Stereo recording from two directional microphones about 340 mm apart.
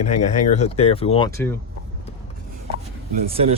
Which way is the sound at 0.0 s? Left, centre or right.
Centre.